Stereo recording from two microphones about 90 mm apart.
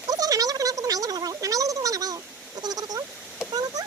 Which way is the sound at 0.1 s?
40° right (ahead or behind).